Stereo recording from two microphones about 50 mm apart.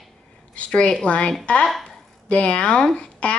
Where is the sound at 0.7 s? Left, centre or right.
Centre.